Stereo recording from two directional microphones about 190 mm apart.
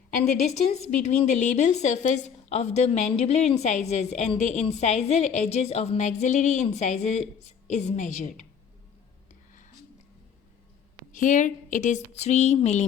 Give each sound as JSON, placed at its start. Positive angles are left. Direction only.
{"t": 0.7, "sound": "a woman's voice", "side_deg": 35}
{"t": 11.1, "sound": "a woman's voice", "side_deg": 40}